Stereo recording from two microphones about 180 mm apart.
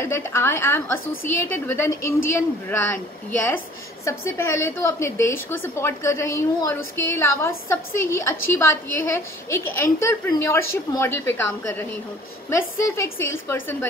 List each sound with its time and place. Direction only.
0.0 s a woman's voice: 15° left (ahead or behind)